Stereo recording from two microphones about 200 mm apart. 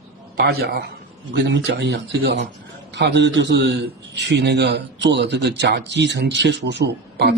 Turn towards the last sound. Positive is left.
turn(degrees=-60)  # may be behind; listen again after turning